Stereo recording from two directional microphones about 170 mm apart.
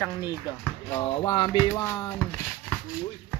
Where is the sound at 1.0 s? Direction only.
25° left (ahead or behind).